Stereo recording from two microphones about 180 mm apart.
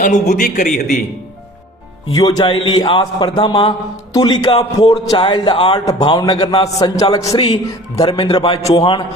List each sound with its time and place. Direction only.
0.3 s a man's voice: 50° left (ahead or behind)
2.1 s a man's voice: 25° left (ahead or behind)